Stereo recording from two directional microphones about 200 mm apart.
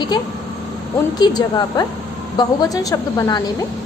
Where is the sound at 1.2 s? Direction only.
20° left (ahead or behind).